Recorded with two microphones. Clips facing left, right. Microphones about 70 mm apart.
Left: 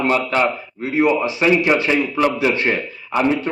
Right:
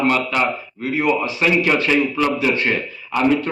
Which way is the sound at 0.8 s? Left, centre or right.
Centre.